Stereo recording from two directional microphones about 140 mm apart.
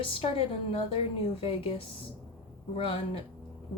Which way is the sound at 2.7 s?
40° left (ahead or behind).